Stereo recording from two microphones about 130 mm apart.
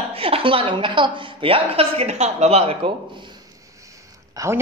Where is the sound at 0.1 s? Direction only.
45° right (ahead or behind).